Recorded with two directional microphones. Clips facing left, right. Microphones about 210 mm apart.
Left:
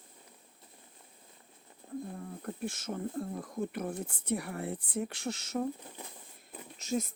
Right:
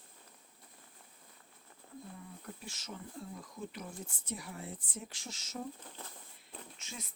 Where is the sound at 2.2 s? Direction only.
50° left (ahead or behind).